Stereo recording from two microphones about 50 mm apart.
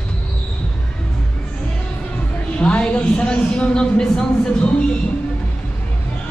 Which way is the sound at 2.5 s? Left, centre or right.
Left.